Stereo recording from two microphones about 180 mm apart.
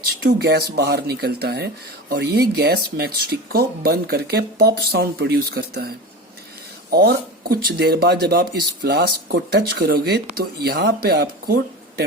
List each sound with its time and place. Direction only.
0.3 s speech: 65° right (ahead or behind)
6.9 s speech: 60° right (ahead or behind)